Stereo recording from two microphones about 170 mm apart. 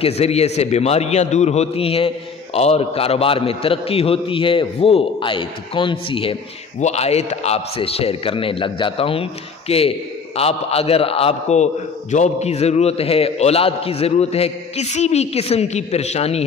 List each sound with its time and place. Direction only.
0.0 s a man's voice: 40° left (ahead or behind)